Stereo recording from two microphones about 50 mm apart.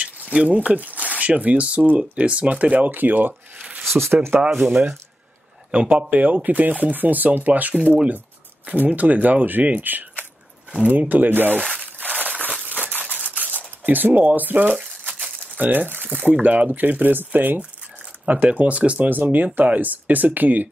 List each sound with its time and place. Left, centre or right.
0.0 s speech: right
3.8 s a sound: centre
4.1 s speech: right
4.5 s speech: centre
5.7 s speech: right
11.7 s crumpling: right
12.6 s a sound: right
15.2 s crumpling: right
16.2 s speech: right